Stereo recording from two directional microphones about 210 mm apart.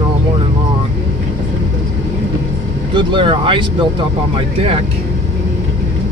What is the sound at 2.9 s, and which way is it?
Speech, 25° right (ahead or behind).